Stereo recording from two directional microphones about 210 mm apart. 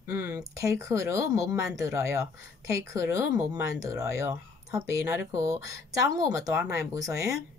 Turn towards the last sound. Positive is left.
turn(degrees=-15)  # may be behind; listen again after turning